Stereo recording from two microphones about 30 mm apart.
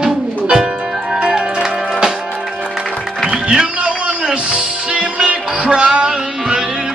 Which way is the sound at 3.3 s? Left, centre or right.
Right.